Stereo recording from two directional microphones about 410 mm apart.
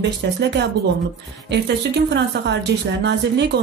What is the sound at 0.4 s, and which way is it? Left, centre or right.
A woman's voice, right.